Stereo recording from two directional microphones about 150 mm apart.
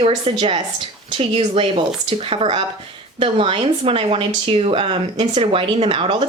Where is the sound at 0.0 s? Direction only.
35° right (ahead or behind).